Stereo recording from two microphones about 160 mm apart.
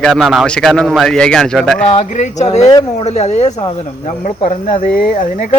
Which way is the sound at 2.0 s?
50° left (ahead or behind).